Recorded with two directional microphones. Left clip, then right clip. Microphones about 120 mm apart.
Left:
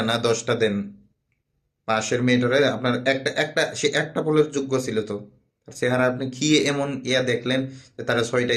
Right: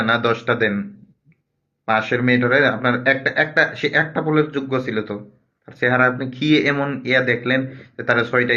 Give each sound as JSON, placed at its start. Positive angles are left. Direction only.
{"t": 0.0, "sound": "speech", "side_deg": 40}